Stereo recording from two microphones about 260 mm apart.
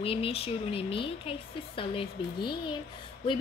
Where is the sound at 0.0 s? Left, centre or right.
Left.